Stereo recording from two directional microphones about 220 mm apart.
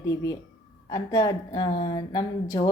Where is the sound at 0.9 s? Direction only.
15° left (ahead or behind).